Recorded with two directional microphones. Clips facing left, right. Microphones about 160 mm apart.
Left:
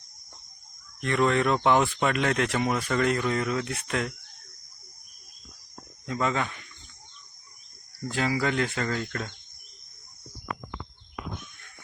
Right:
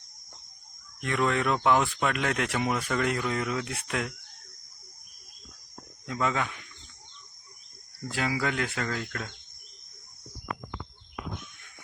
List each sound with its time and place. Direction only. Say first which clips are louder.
1.0 s speech: left 3 dB; 5° right (ahead or behind)
6.1 s speech: left 1 dB; 5° right (ahead or behind)
8.1 s speech: left 3 dB; 5° right (ahead or behind)